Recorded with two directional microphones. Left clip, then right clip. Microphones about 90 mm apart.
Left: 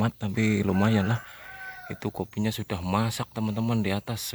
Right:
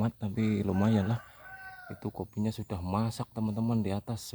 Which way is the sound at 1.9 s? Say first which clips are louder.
Left 6 dB; centre (ahead or behind).